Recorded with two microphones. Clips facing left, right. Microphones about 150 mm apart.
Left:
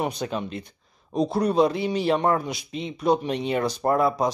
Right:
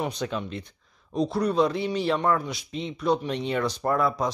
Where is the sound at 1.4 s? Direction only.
15° left (ahead or behind).